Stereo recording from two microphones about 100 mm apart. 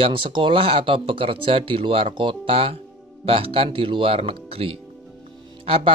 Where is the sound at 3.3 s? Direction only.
65° right (ahead or behind).